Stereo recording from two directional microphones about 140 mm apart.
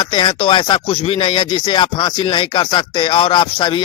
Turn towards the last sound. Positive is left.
turn(degrees=35)  # may be behind; listen again after turning